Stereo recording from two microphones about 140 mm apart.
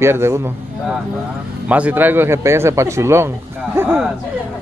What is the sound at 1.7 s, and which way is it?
Speech, 10° right (ahead or behind).